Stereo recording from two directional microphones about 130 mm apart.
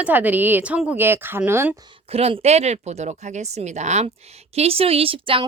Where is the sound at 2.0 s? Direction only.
50° right (ahead or behind).